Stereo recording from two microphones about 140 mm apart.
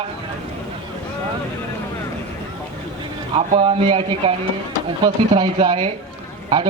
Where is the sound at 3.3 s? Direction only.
40° right (ahead or behind).